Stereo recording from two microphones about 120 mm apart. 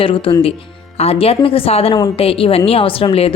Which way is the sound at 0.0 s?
50° left (ahead or behind).